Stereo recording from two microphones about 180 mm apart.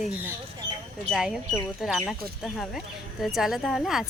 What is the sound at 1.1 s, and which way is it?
Speech, centre (ahead or behind).